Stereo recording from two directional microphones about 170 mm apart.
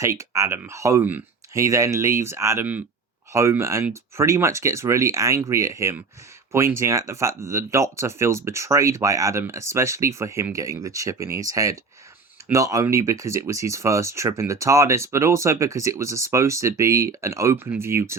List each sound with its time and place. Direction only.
0.0 s speech: 15° right (ahead or behind)